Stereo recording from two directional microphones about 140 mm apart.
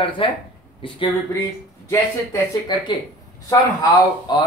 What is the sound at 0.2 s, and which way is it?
Speech, 40° left (ahead or behind).